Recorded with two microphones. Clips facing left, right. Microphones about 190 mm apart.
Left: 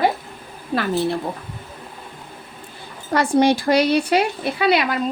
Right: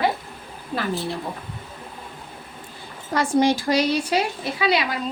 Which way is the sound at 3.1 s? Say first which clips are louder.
Left 3 dB; 65° left (ahead or behind).